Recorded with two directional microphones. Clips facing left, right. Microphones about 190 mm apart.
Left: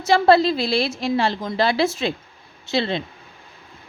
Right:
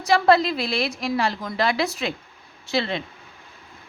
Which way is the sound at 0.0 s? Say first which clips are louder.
Left 3 dB; 30° left (ahead or behind).